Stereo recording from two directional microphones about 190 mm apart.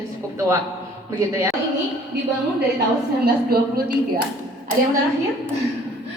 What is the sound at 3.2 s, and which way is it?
Speech, 55° right (ahead or behind).